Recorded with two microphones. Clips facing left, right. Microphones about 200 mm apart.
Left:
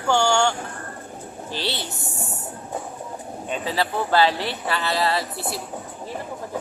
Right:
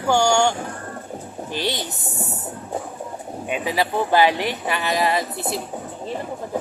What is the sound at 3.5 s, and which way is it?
Speech, 15° right (ahead or behind).